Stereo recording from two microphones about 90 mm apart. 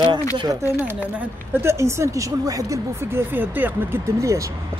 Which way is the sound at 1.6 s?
30° right (ahead or behind).